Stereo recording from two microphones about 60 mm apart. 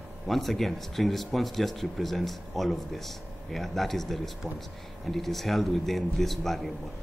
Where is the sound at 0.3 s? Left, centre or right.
Centre.